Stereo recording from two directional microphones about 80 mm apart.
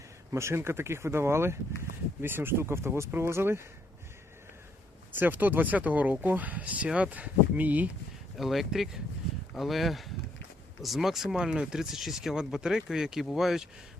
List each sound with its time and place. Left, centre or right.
0.3 s speech: right
5.2 s speech: right
8.4 s speech: centre